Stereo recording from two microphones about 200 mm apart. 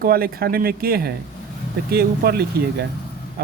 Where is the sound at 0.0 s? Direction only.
50° right (ahead or behind).